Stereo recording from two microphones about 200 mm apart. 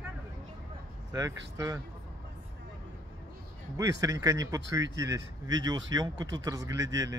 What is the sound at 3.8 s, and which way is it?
Speech, 15° right (ahead or behind).